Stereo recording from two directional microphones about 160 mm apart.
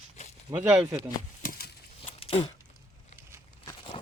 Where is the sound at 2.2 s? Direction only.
35° left (ahead or behind).